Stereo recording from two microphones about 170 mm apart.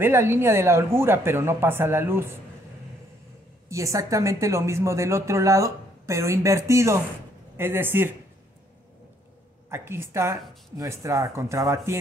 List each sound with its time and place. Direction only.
0.0 s a woman's voice: 15° right (ahead or behind)
3.6 s a woman's voice: 20° right (ahead or behind)
9.7 s a woman's voice: 15° right (ahead or behind)